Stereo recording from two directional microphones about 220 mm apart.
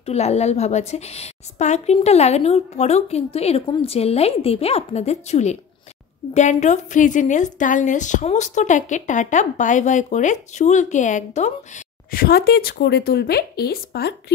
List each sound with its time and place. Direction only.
0.0 s a woman's voice: 30° left (ahead or behind); by 14.1 s 45° left (ahead or behind)